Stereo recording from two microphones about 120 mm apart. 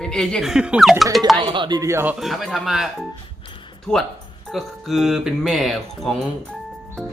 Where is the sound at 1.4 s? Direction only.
40° right (ahead or behind).